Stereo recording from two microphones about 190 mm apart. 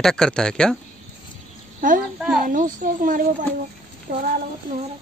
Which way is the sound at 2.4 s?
45° right (ahead or behind).